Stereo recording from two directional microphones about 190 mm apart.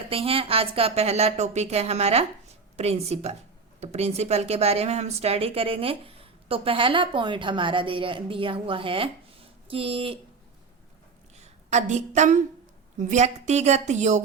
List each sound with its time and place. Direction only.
0.1 s a woman's voice: 30° right (ahead or behind)
11.3 s a woman's voice: 35° right (ahead or behind)